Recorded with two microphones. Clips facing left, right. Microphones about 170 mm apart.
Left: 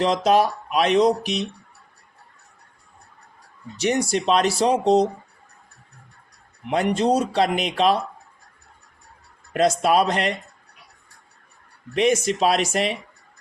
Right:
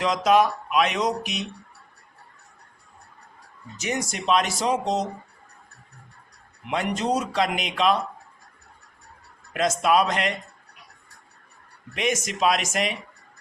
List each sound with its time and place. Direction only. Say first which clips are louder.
0.0 s speech: left 1 dB; 35° left (ahead or behind)
3.8 s speech: left 7 dB; 35° left (ahead or behind)
6.7 s speech: left 5 dB; 35° left (ahead or behind)
9.5 s speech: left 3 dB; 35° left (ahead or behind)
11.9 s speech: left 6 dB; 30° left (ahead or behind)